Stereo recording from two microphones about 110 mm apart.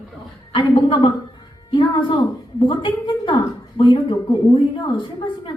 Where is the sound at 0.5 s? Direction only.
50° left (ahead or behind).